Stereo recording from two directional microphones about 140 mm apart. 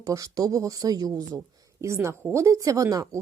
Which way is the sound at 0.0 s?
25° right (ahead or behind).